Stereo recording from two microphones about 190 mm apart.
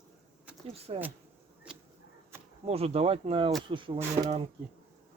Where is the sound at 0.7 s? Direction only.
30° right (ahead or behind).